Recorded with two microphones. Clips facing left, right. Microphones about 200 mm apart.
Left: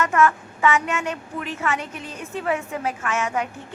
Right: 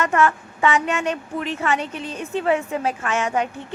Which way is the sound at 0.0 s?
30° right (ahead or behind).